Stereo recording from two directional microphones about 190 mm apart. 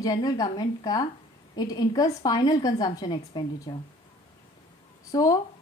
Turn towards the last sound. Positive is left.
turn(degrees=20)  # may be behind; listen again after turning